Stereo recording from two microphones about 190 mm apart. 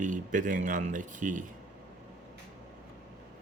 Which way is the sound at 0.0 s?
40° right (ahead or behind).